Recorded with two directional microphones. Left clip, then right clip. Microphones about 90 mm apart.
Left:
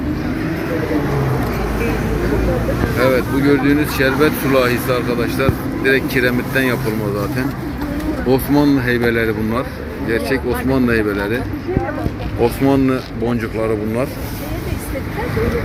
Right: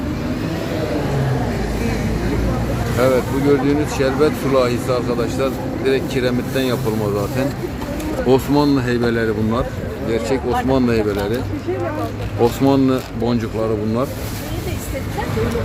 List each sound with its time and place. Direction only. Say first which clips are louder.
3.0 s speech: even; 10° right (ahead or behind)
8.5 s speech: left 2 dB; 25° right (ahead or behind); by 11.3 s 10° right (ahead or behind)
12.6 s speech: left 1 dB; 45° right (ahead or behind)